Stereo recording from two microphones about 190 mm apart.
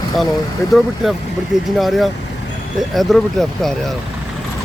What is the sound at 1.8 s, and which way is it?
Speech, centre (ahead or behind).